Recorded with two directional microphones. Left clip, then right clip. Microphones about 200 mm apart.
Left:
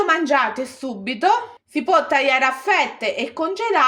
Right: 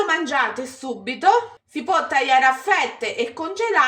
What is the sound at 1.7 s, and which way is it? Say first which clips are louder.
A woman's voice: left 3 dB; 45° left (ahead or behind).